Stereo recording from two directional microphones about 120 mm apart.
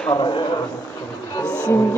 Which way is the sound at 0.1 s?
40° left (ahead or behind).